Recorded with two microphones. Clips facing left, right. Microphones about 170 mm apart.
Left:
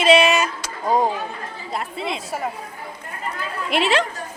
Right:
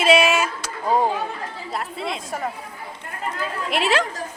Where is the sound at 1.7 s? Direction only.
Centre (ahead or behind).